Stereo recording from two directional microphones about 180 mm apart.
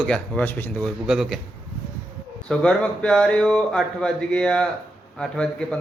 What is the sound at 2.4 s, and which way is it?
Speech, 5° left (ahead or behind).